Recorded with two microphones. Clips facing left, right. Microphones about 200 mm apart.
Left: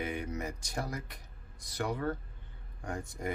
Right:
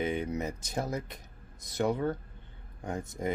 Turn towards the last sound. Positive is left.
turn(degrees=-20)  # may be behind; listen again after turning